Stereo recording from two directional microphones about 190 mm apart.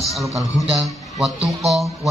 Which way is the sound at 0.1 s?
Centre (ahead or behind).